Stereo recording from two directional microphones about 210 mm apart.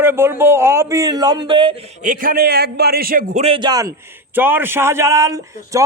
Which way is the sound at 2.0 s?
40° right (ahead or behind).